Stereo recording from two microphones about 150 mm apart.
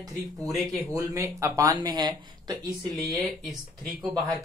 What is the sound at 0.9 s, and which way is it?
Speech, 20° right (ahead or behind).